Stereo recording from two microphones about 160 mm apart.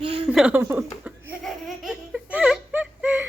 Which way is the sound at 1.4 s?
Centre (ahead or behind).